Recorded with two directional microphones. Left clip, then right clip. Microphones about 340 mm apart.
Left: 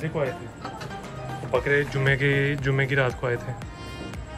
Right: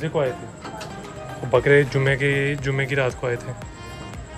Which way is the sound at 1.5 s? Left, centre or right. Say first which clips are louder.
Right 6 dB; right.